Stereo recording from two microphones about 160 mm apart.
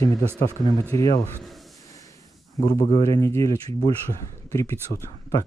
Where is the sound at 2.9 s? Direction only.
20° left (ahead or behind).